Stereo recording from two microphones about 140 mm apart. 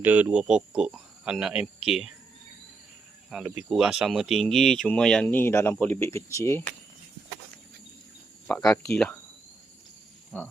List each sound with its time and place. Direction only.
0.0 s speech: 10° right (ahead or behind)
3.2 s speech: 5° right (ahead or behind)
5.2 s speech: 15° left (ahead or behind)
8.4 s speech: 5° left (ahead or behind)
10.3 s speech: 10° left (ahead or behind)